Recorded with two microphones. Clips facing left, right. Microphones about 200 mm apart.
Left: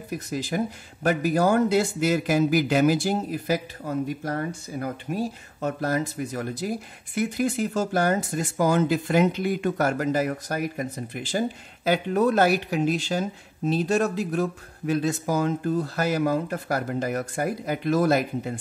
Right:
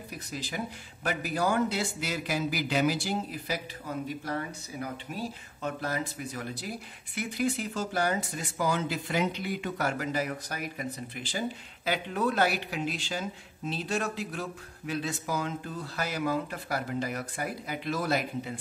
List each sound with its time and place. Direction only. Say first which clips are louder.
0.3 s speech: left 8 dB; 45° left (ahead or behind)